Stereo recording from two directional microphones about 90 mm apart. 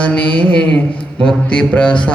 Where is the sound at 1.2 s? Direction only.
10° left (ahead or behind).